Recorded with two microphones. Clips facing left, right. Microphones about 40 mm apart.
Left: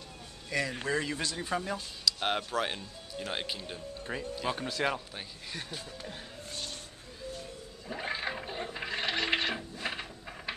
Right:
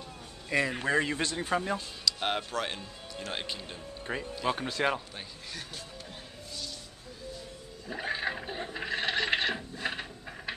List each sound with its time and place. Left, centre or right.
0.5 s a man's voice: right
2.0 s speech: centre
4.0 s speech: centre
6.5 s a sound: left
7.9 s speech: centre
9.0 s a sound: centre